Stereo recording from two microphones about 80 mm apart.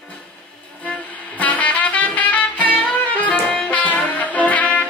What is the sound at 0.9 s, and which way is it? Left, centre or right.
Music, centre.